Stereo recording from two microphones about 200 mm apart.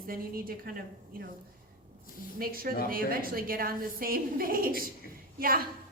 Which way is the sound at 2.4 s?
45° right (ahead or behind).